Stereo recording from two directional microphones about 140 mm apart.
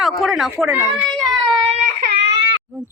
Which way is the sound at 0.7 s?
15° right (ahead or behind).